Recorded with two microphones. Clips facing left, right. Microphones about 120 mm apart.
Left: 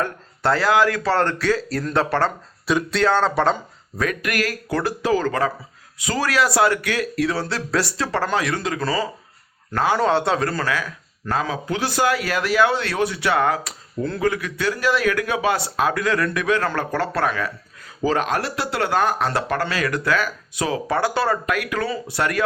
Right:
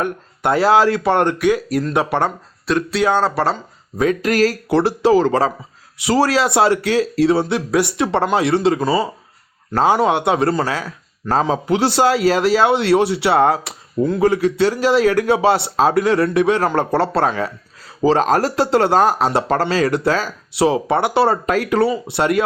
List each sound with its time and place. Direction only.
0.0 s a man's voice: 20° right (ahead or behind)
2.6 s speech: centre (ahead or behind)
3.0 s speech: 10° right (ahead or behind)
3.9 s a man's voice: 25° right (ahead or behind)